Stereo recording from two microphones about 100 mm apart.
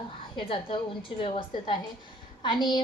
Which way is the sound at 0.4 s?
65° left (ahead or behind).